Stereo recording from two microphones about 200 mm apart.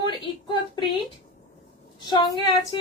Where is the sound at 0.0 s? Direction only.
20° left (ahead or behind).